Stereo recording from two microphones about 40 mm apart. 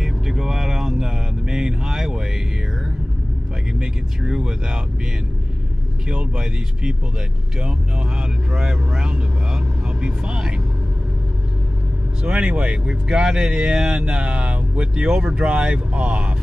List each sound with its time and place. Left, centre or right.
0.0 s vehicle: centre
3.8 s speech: centre
6.0 s speech: right
8.5 s speech: centre
12.2 s speech: right